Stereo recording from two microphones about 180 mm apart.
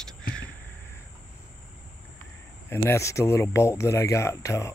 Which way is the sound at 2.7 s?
15° left (ahead or behind).